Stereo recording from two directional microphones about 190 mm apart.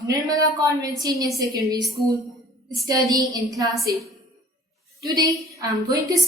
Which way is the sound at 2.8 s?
20° right (ahead or behind).